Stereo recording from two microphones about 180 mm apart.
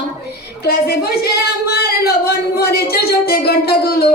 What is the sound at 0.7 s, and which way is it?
Speech, 60° left (ahead or behind).